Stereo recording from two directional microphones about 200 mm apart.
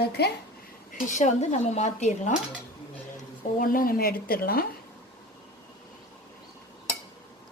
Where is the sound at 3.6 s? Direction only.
45° left (ahead or behind).